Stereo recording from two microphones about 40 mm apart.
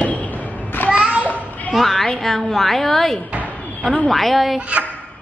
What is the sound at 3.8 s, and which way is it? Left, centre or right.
Speech, left.